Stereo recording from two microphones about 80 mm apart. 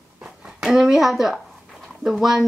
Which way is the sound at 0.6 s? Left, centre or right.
Centre.